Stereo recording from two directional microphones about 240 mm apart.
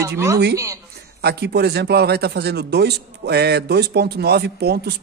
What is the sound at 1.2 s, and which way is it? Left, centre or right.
A man's voice, right.